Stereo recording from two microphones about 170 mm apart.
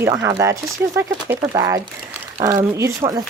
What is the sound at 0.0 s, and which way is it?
Speech, 20° right (ahead or behind).